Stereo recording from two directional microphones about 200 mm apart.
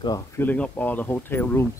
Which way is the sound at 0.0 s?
20° left (ahead or behind).